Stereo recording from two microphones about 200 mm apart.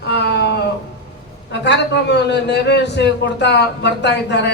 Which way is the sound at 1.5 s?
60° left (ahead or behind).